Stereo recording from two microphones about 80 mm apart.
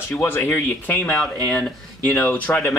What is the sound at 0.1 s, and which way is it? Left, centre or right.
Speech, left.